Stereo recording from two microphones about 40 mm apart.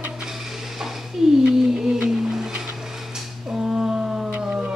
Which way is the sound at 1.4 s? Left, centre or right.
Right.